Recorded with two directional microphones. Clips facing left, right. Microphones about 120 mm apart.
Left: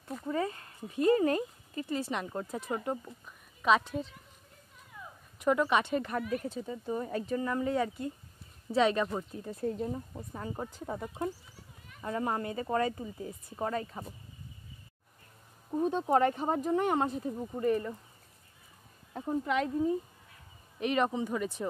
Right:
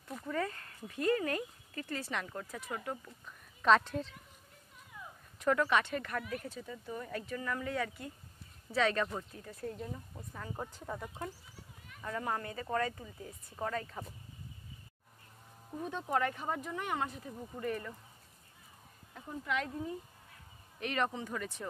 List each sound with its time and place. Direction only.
0.2 s speech: 20° left (ahead or behind)
3.3 s a woman's voice: 5° left (ahead or behind)
5.4 s speech: 15° left (ahead or behind)
15.7 s speech: 30° left (ahead or behind)
19.1 s speech: 35° left (ahead or behind); by 21.6 s 15° left (ahead or behind)